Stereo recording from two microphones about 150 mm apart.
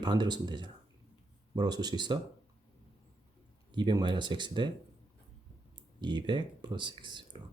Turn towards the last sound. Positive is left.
turn(degrees=-30)  # may be behind; listen again after turning